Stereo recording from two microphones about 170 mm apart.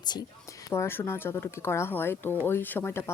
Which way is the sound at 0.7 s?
15° left (ahead or behind).